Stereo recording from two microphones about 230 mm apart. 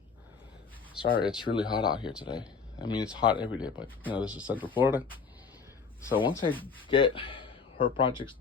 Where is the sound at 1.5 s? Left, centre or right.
Centre.